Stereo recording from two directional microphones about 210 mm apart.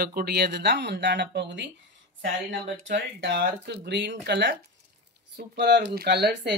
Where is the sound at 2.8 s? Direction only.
60° right (ahead or behind).